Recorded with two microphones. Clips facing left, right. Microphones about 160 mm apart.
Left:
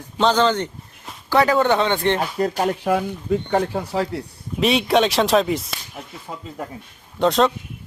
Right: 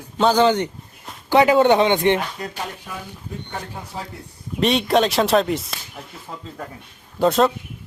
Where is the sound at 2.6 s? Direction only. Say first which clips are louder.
Left 13 dB; 70° left (ahead or behind).